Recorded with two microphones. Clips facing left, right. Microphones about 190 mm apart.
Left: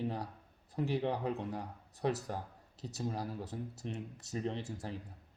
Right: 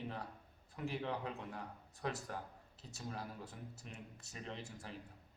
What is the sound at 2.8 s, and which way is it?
Speech, 35° left (ahead or behind).